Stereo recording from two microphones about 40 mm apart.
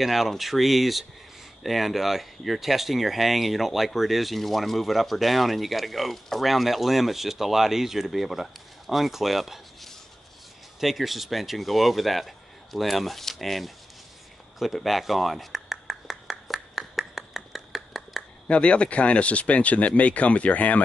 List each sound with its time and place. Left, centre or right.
0.0 s speech: centre
14.6 s clapping: centre
18.5 s speech: left